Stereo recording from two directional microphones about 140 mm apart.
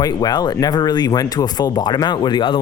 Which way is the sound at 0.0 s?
30° left (ahead or behind).